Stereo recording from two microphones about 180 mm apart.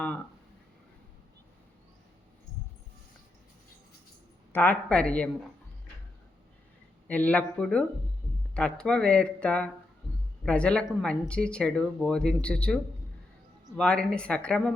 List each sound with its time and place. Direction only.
4.5 s speech: 10° left (ahead or behind)
7.1 s speech: 10° left (ahead or behind)